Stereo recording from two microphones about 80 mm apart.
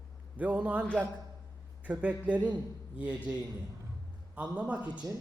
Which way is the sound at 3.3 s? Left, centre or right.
Centre.